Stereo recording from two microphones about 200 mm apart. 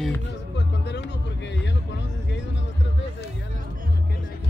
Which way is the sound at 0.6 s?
60° left (ahead or behind).